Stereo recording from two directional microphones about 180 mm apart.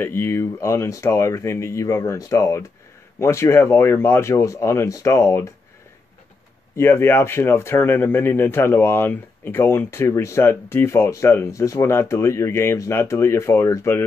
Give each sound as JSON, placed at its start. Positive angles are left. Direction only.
{"t": 0.0, "sound": "speech", "side_deg": 15}
{"t": 6.8, "sound": "speech", "side_deg": 15}